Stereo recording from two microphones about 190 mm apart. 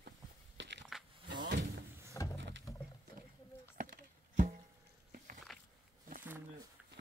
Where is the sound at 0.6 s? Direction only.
65° right (ahead or behind).